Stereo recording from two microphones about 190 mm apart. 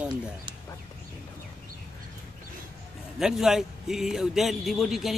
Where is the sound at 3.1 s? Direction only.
Centre (ahead or behind).